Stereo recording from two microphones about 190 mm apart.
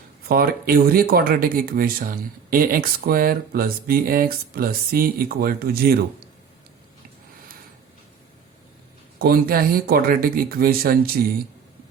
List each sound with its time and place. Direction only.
0.3 s speech: 50° right (ahead or behind)
9.1 s speech: 50° right (ahead or behind)